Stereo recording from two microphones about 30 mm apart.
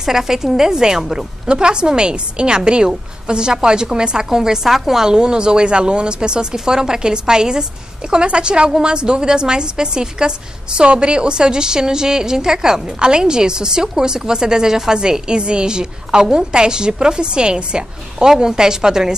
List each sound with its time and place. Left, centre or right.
0.0 s a woman's voice: centre
1.4 s a woman's voice: right; by 5.1 s centre
5.1 s a woman's voice: right
18.2 s a woman's voice: right